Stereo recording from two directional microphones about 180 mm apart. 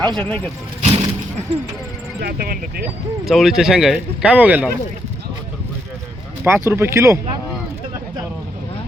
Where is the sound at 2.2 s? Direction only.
55° right (ahead or behind).